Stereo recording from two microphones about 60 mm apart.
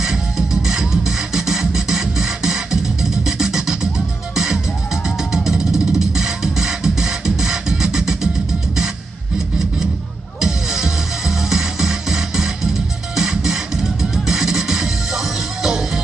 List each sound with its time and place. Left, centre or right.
0.0 s music: centre
5.0 s music: centre
10.4 s music: centre